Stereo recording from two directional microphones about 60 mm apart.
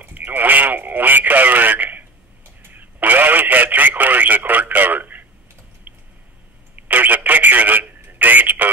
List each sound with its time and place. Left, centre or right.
0.0 s radio: right
5.9 s a sound: right
6.7 s telephone: right